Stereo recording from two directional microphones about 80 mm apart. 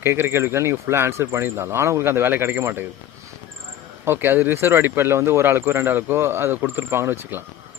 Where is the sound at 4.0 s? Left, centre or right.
Right.